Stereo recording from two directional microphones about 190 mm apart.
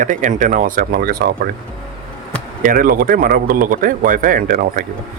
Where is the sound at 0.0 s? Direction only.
40° right (ahead or behind).